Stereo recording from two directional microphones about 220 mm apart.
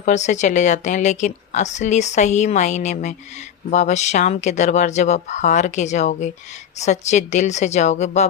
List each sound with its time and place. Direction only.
0.0 s speech: 35° left (ahead or behind)